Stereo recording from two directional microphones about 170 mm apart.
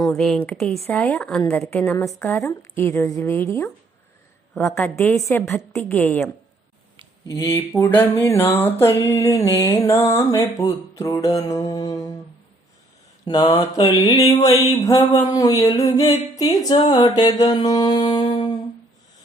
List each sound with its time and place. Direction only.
0.0 s music: 10° left (ahead or behind)
1.5 s a woman's voice: centre (ahead or behind)
1.8 s music: 15° left (ahead or behind)
13.2 s a sound: 25° left (ahead or behind)